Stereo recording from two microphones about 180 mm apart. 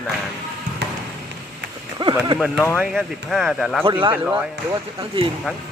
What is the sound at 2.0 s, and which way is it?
Speech, 30° right (ahead or behind).